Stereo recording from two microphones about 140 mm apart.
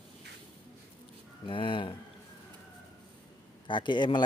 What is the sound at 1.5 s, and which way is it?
Speech, 35° left (ahead or behind).